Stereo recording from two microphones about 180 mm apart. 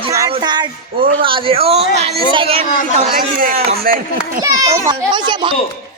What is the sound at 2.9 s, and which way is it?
Speech, 50° right (ahead or behind).